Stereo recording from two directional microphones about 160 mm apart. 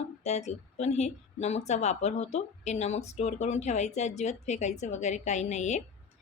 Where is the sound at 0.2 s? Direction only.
45° left (ahead or behind).